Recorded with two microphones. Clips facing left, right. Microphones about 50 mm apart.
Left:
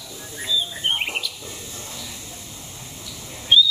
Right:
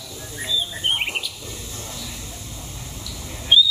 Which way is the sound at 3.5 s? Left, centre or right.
Centre.